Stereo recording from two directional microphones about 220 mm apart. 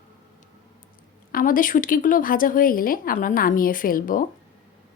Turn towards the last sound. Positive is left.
turn(degrees=40)  # may be behind; listen again after turning